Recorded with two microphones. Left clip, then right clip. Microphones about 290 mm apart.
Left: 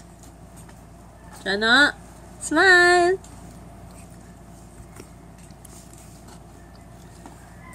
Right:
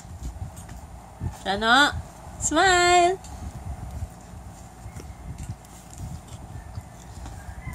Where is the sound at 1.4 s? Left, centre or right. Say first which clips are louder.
Left 2 dB; right.